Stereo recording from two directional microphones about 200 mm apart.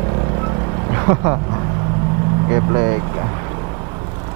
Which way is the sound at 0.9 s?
20° right (ahead or behind).